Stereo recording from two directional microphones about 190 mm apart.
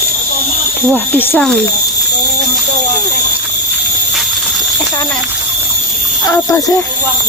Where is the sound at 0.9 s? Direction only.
10° left (ahead or behind).